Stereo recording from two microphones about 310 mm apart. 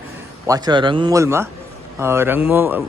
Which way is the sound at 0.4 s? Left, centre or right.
Centre.